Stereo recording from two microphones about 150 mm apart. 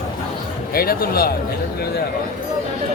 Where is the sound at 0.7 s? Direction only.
85° left.